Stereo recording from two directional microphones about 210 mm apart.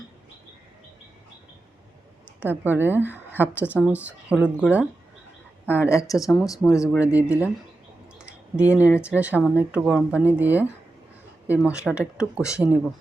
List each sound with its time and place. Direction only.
2.5 s speech: 10° right (ahead or behind)
5.9 s speech: 15° left (ahead or behind)
6.7 s speech: 5° right (ahead or behind)
8.5 s speech: 5° right (ahead or behind)